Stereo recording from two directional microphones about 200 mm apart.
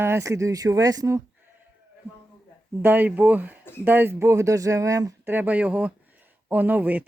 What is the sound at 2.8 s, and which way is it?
Speech, 10° right (ahead or behind).